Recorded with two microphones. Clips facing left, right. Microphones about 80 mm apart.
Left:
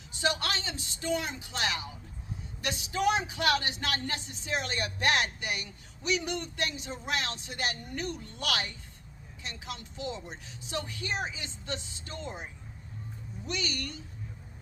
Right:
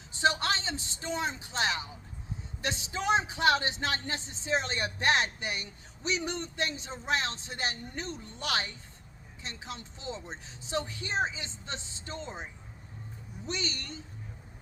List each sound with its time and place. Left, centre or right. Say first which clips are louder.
0.1 s speech: right 3 dB; right
13.5 s speech: left 1 dB; right